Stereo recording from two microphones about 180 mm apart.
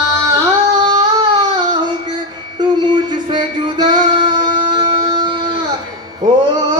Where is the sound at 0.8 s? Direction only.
25° right (ahead or behind).